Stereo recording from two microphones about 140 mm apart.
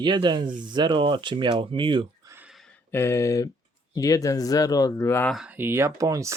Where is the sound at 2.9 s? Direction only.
20° left (ahead or behind).